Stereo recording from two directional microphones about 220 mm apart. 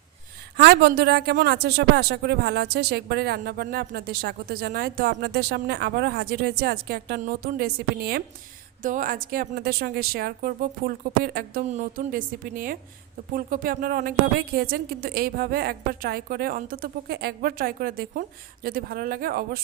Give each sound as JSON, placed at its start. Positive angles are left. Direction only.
{"t": 0.5, "sound": "a woman's voice", "side_deg": -50}